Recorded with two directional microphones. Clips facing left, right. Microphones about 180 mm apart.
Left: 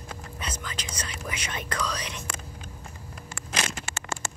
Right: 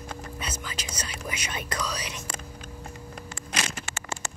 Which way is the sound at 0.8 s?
10° right (ahead or behind).